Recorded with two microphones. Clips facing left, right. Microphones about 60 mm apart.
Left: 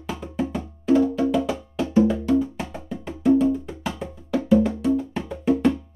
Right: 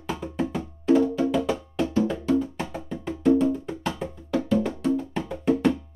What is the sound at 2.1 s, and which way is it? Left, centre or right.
Wood block, centre.